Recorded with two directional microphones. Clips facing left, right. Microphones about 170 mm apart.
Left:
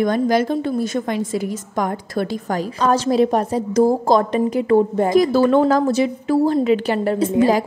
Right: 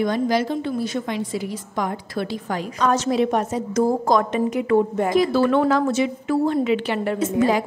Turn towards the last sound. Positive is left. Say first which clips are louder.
# left 3 dB
turn(degrees=35)  # may be behind; listen again after turning